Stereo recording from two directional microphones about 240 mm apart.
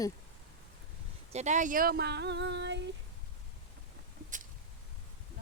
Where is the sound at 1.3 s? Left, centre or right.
Right.